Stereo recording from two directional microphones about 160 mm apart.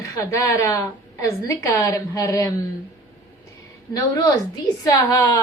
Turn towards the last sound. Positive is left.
turn(degrees=20)  # may be behind; listen again after turning